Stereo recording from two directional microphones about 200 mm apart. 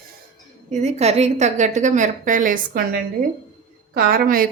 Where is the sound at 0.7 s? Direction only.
35° right (ahead or behind).